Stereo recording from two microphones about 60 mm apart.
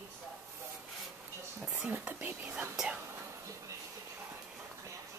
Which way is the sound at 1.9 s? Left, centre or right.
Right.